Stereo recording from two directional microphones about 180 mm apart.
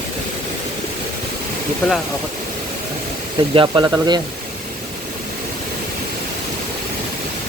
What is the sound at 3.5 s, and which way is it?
Speech, 25° right (ahead or behind).